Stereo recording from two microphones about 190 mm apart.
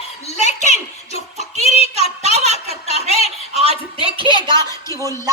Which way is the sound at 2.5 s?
35° right (ahead or behind).